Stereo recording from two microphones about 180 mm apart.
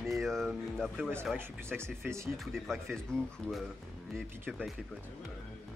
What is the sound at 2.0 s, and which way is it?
Speech, 15° right (ahead or behind).